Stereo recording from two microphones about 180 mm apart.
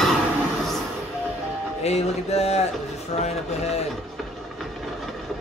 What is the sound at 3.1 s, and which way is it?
Speech, 35° left (ahead or behind).